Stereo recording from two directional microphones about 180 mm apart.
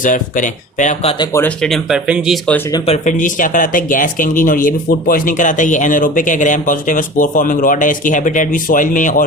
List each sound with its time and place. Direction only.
0.0 s speech: 45° left (ahead or behind)
1.2 s speech: 15° left (ahead or behind); by 2.4 s 5° right (ahead or behind)
2.8 s speech: 40° left (ahead or behind)